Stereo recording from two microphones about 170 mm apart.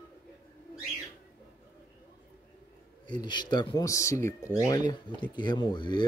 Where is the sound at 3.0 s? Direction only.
25° left (ahead or behind).